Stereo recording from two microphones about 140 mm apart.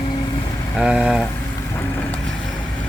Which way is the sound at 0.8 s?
5° right (ahead or behind).